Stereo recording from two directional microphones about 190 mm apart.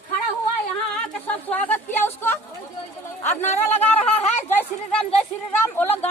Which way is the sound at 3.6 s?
10° left (ahead or behind).